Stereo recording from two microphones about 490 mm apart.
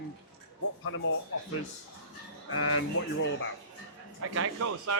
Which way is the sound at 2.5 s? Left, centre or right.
Left.